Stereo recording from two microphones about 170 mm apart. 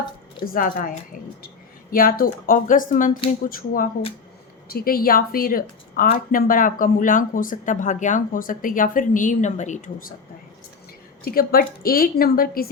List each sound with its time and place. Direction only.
0.4 s a woman's voice: 55° left (ahead or behind)
11.2 s a woman's voice: 60° left (ahead or behind)